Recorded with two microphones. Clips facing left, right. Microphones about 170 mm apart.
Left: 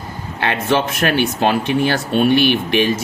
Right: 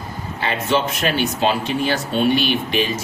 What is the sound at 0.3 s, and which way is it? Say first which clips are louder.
Speech: left 3 dB; 60° left (ahead or behind).